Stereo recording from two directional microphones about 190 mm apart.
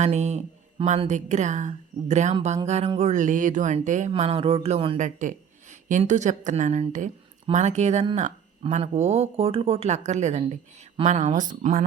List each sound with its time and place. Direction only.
0.0 s speech: 35° right (ahead or behind)
4.1 s speech: 30° right (ahead or behind)